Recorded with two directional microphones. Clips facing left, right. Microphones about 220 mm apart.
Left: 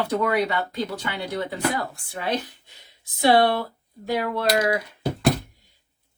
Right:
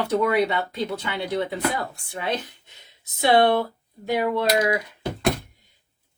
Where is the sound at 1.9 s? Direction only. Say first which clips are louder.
Left 1 dB; 20° right (ahead or behind).